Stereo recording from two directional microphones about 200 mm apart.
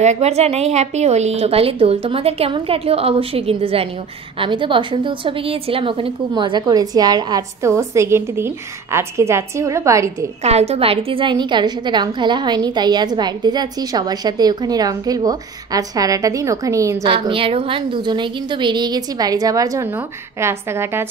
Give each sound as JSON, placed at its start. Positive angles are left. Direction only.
{"t": 0.0, "sound": "a woman's voice", "side_deg": -35}
{"t": 10.4, "sound": "a woman's voice", "side_deg": -30}
{"t": 17.0, "sound": "a woman's voice", "side_deg": -25}